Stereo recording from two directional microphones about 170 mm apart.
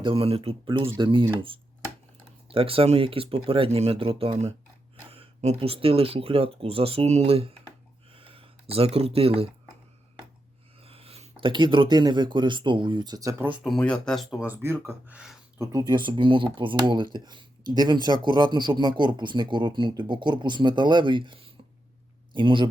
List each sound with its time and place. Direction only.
0.0 s speech: 30° right (ahead or behind)
2.5 s speech: 35° right (ahead or behind)
8.1 s a sound: 35° right (ahead or behind)
10.8 s speech: 35° right (ahead or behind)
13.5 s a man's voice: 5° left (ahead or behind); by 22.7 s 30° right (ahead or behind)